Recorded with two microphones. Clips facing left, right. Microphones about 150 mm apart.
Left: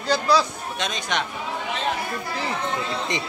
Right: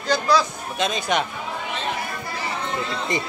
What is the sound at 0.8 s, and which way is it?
Speech, 5° right (ahead or behind).